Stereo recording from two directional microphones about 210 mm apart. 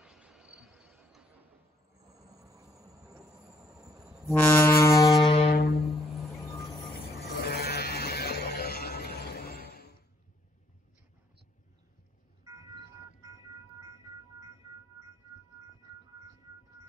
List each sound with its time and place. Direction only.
0.0 s a sound: 5° right (ahead or behind)
2.1 s train: 15° right (ahead or behind)
3.7 s insect: 15° right (ahead or behind)
4.1 s brass instrument: 10° left (ahead or behind)
5.5 s music: 45° left (ahead or behind)
7.4 s a sound: 50° left (ahead or behind)